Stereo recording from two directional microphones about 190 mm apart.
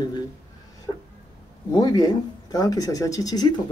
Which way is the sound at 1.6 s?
20° left (ahead or behind).